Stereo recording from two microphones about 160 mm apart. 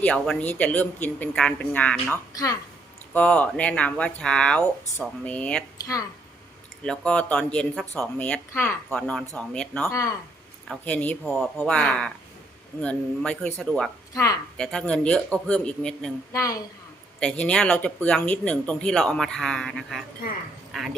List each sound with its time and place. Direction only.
0.0 s speech: 10° left (ahead or behind)
5.8 s a woman's voice: 20° left (ahead or behind)
6.8 s speech: 5° left (ahead or behind)
9.8 s a woman's voice: 20° left (ahead or behind)
11.2 s speech: centre (ahead or behind)
14.1 s a woman's voice: 20° left (ahead or behind)
14.6 s speech: 5° left (ahead or behind)
16.3 s a woman's voice: 20° left (ahead or behind)
17.2 s speech: 5° left (ahead or behind)